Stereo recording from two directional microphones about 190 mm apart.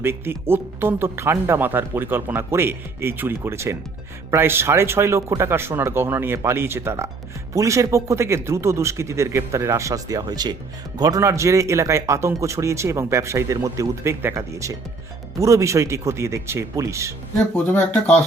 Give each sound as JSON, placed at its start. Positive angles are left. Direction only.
{"t": 0.0, "sound": "a man's voice", "side_deg": -10}
{"t": 17.7, "sound": "speech", "side_deg": 5}